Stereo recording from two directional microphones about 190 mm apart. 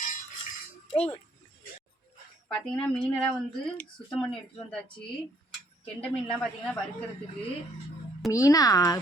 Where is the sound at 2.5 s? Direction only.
Centre (ahead or behind).